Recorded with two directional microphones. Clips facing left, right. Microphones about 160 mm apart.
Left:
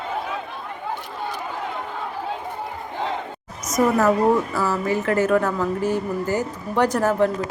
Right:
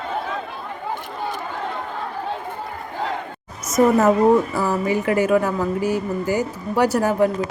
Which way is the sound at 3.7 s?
25° right (ahead or behind).